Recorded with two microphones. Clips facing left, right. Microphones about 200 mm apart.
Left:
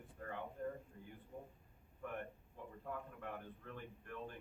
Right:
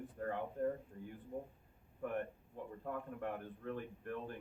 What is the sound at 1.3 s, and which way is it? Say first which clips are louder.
Speech: right 7 dB; 40° right (ahead or behind).